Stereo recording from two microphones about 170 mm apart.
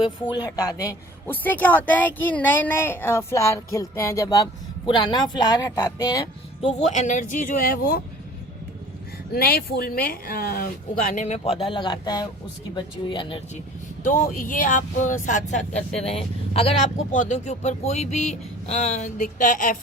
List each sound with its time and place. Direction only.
0.0 s a woman's voice: 25° left (ahead or behind)
6.8 s speech: 45° left (ahead or behind)
9.3 s speech: 65° left (ahead or behind); by 13.4 s 30° left (ahead or behind)
14.0 s speech: 50° left (ahead or behind)